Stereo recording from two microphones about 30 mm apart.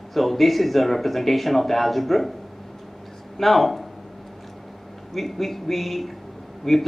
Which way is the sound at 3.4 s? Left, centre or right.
Centre.